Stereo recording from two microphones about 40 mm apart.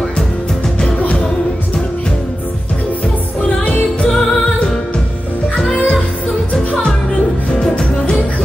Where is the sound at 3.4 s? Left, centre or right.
Left.